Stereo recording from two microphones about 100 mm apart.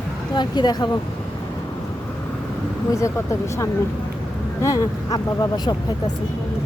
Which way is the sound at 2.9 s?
30° left (ahead or behind).